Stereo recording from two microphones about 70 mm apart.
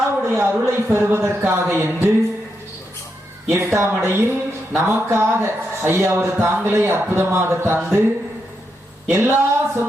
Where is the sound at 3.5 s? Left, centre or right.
Right.